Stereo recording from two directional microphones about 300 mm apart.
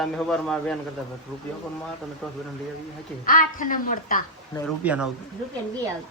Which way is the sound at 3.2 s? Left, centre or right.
Left.